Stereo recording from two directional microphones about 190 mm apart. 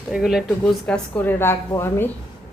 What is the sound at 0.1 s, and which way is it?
Speech, centre (ahead or behind).